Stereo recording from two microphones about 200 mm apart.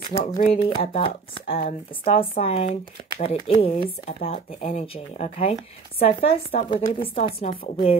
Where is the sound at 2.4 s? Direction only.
30° left (ahead or behind).